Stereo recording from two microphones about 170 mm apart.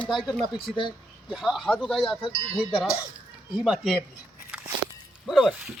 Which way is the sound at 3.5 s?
5° right (ahead or behind).